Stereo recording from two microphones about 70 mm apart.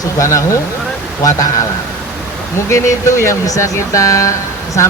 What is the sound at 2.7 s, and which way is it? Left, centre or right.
Speech, left.